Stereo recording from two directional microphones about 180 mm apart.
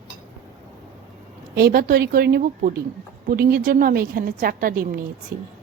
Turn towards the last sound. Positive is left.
turn(degrees=-55)  # may be behind; listen again after turning